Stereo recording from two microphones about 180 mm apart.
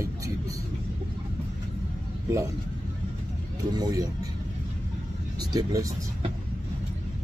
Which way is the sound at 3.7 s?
20° right (ahead or behind).